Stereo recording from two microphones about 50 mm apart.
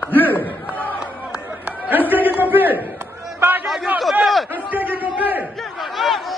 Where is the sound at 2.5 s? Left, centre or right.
Right.